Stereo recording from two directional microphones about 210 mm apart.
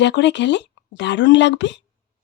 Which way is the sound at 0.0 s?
55° left (ahead or behind).